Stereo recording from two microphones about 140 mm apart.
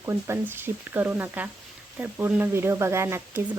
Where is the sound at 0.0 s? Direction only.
20° right (ahead or behind).